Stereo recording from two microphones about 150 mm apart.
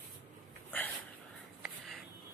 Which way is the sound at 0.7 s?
10° left (ahead or behind).